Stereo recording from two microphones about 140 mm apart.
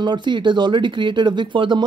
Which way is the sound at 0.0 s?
30° right (ahead or behind).